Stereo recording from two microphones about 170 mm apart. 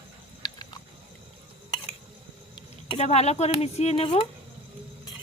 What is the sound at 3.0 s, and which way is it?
Speech, 40° left (ahead or behind).